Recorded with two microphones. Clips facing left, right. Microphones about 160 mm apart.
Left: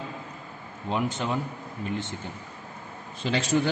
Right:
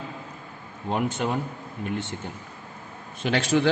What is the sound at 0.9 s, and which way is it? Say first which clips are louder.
Speech: right 2 dB; 55° right (ahead or behind).